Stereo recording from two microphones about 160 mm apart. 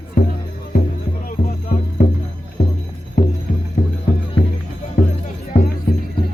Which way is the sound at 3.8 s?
70° left (ahead or behind).